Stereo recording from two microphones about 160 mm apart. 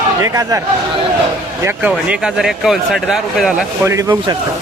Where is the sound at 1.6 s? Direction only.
10° right (ahead or behind).